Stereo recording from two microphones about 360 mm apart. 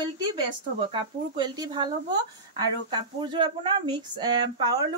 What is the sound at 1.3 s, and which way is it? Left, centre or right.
A woman's voice, centre.